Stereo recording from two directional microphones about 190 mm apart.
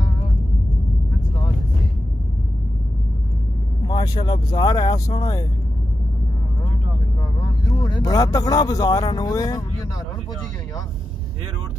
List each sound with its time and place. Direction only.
3.8 s speech: 20° left (ahead or behind)
7.8 s speech: 20° left (ahead or behind)